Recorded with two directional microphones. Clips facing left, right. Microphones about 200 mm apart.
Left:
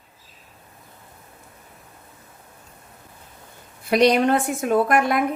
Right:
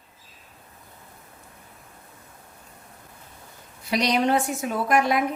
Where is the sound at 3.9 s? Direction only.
55° left (ahead or behind).